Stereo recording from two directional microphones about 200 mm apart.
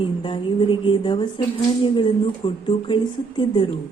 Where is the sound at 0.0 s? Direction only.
25° left (ahead or behind).